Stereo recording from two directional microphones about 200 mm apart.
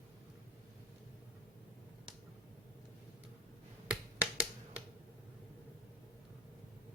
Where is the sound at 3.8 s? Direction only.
5° right (ahead or behind).